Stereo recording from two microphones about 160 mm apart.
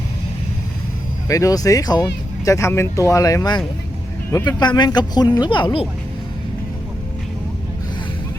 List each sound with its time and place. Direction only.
1.3 s speech: 20° left (ahead or behind)
4.6 s speech: 25° left (ahead or behind)